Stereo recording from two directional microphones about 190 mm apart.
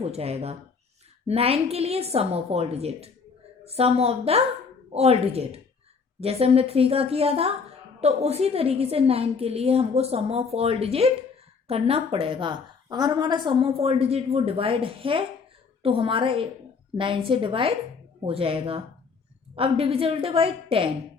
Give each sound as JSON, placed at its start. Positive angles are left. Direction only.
{"t": 0.0, "sound": "a woman's voice", "side_deg": -30}